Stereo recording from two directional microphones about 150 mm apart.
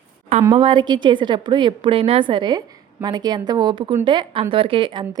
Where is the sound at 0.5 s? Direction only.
35° right (ahead or behind).